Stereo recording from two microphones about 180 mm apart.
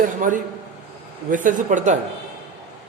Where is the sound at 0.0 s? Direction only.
45° right (ahead or behind).